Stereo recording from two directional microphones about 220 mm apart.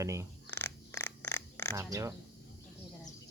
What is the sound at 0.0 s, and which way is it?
Speech, 15° right (ahead or behind).